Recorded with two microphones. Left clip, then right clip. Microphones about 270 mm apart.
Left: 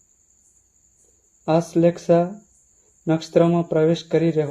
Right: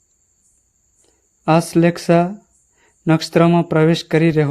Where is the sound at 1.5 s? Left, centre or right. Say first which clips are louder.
Right 3 dB; right.